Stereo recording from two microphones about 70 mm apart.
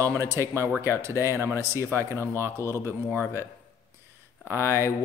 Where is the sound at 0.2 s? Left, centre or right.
Right.